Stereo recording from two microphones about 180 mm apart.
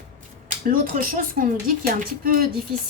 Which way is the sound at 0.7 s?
50° right (ahead or behind).